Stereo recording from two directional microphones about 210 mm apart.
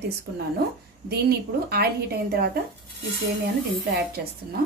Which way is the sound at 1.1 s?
50° right (ahead or behind).